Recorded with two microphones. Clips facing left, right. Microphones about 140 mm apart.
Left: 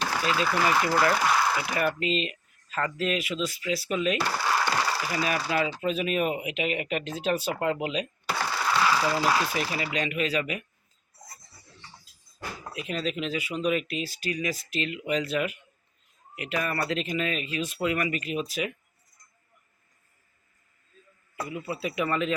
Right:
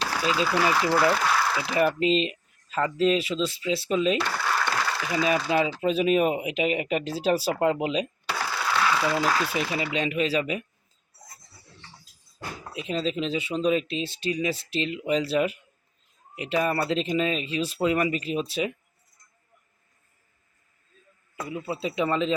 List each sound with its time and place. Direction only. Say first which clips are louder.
0.0 s a sound: even; 10° left (ahead or behind)
0.3 s speech: right 1 dB; centre (ahead or behind)
1.5 s a sound: even; centre (ahead or behind)
1.7 s speech: right 5 dB; 30° right (ahead or behind)
4.5 s a sound: left 1 dB; 15° left (ahead or behind)
4.9 s a sound: even; 5° left (ahead or behind)
5.8 s speech: right 5 dB; 30° right (ahead or behind)
8.4 s ratchet: even; centre (ahead or behind)
9.1 s speech: even; 5° left (ahead or behind)
9.7 s speech: right 3 dB; 25° right (ahead or behind)
12.7 s speech: right 3 dB; 30° right (ahead or behind)
21.5 s speech: right 3 dB; 25° right (ahead or behind)